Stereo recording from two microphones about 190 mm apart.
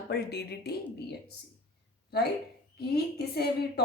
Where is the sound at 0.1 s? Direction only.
60° left (ahead or behind).